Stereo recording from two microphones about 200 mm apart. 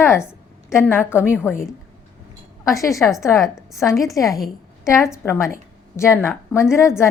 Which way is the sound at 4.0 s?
15° left (ahead or behind).